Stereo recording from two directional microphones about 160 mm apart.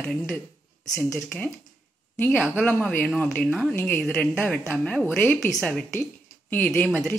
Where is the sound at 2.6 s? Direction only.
10° left (ahead or behind).